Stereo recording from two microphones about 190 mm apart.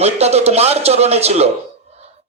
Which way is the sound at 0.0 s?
35° right (ahead or behind).